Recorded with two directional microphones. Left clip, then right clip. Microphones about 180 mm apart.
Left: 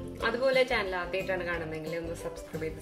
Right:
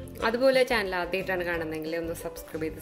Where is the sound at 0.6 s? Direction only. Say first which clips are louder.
Right 3 dB; 55° right (ahead or behind).